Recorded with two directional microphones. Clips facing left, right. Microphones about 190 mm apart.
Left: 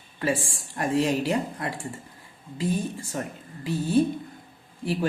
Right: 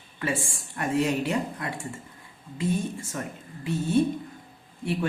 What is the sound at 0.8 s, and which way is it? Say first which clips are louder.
A man's voice: left 1 dB; 35° left (ahead or behind).